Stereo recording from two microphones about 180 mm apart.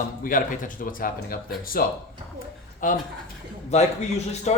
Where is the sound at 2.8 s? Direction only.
50° left (ahead or behind).